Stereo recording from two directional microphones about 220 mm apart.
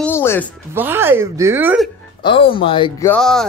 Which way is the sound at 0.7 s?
10° right (ahead or behind).